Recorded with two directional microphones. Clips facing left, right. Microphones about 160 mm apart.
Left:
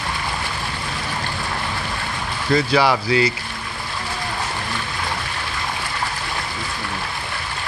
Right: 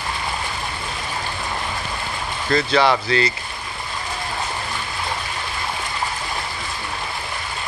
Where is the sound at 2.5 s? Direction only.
10° left (ahead or behind).